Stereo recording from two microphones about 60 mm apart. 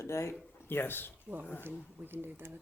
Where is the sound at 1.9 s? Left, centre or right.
Right.